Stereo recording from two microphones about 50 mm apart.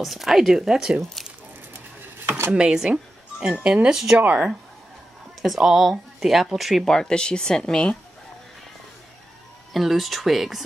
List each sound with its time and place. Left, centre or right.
0.0 s speech: centre
2.2 s a sound: right
2.5 s speech: centre
3.9 s speech: centre
4.2 s speech: right
5.4 s speech: centre
6.8 s speech: centre
9.7 s speech: centre